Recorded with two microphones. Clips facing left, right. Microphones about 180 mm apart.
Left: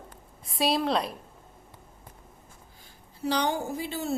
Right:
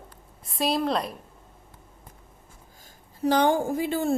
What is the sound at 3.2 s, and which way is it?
Speech, 50° right (ahead or behind).